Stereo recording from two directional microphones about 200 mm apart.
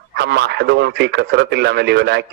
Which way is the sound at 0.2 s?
55° right (ahead or behind).